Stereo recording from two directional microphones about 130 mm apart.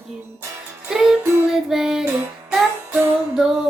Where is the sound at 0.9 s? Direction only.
5° right (ahead or behind).